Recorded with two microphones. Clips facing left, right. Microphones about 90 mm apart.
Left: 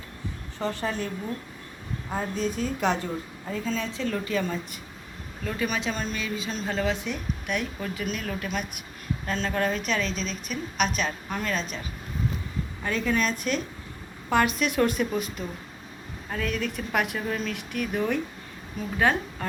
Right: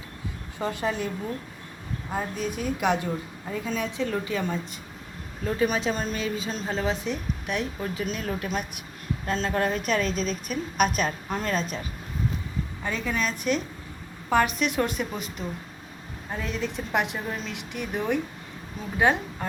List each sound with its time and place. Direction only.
0.6 s a woman's voice: 10° right (ahead or behind)
2.1 s a woman's voice: 10° right (ahead or behind)
5.4 s a woman's voice: 30° right (ahead or behind)
6.7 s a woman's voice: 30° right (ahead or behind)
11.3 s a woman's voice: 25° right (ahead or behind)
12.8 s a woman's voice: 5° right (ahead or behind)